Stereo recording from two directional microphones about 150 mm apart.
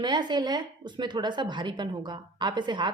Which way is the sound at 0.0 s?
30° right (ahead or behind).